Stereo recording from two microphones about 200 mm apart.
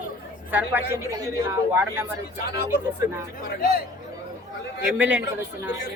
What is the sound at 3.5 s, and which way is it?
Speech, 50° left (ahead or behind).